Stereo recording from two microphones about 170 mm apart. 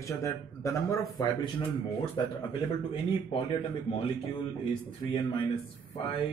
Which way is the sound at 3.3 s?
30° left (ahead or behind).